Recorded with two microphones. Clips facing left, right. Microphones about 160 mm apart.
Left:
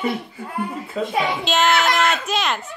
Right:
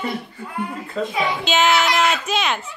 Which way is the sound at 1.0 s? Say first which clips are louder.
Even; 10° left (ahead or behind).